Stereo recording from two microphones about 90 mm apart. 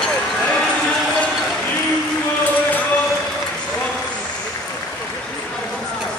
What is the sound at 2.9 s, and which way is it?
Applause, 5° left (ahead or behind).